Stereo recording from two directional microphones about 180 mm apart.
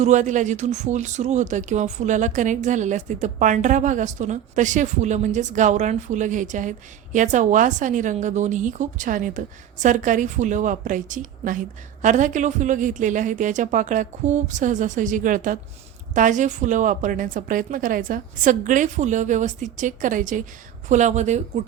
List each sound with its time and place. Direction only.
0.0 s speech: 45° right (ahead or behind)